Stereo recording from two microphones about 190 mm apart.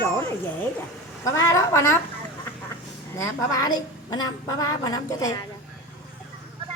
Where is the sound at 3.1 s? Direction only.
20° left (ahead or behind).